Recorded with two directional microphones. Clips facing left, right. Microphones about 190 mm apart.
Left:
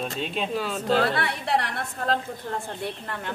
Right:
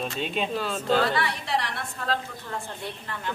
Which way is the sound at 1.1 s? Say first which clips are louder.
Left 2 dB; 55° left (ahead or behind).